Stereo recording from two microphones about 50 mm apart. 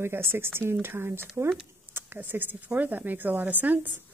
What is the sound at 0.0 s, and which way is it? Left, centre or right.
Speech, right.